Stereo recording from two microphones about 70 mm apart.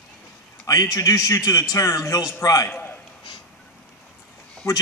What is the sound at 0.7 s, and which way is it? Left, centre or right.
A man's voice, left.